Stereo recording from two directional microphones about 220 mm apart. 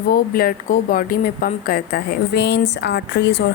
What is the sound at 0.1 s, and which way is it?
A woman's voice, 40° left (ahead or behind).